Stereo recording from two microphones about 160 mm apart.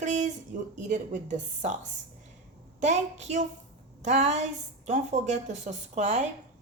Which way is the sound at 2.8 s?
45° right (ahead or behind).